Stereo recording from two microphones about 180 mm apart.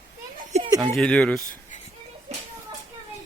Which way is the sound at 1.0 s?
5° left (ahead or behind).